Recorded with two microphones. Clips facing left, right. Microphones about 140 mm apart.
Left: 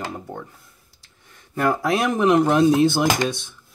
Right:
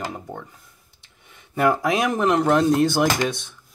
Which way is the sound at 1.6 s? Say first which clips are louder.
Right 1 dB; 10° right (ahead or behind).